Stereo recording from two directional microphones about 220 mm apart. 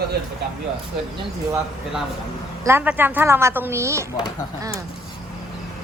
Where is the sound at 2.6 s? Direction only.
10° right (ahead or behind).